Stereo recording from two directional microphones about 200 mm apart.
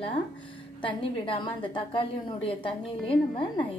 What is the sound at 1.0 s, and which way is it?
A woman's voice, 25° left (ahead or behind).